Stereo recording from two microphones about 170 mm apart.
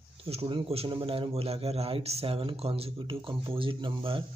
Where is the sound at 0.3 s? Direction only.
35° right (ahead or behind).